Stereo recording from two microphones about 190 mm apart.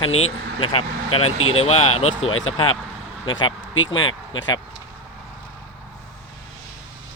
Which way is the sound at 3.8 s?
90° left.